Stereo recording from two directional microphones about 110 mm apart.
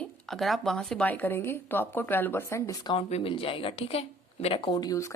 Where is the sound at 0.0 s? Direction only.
Centre (ahead or behind).